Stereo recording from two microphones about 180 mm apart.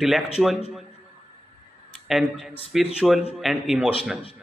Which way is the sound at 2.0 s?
Centre (ahead or behind).